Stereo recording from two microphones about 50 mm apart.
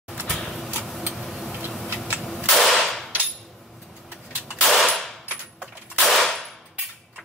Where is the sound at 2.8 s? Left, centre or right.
Centre.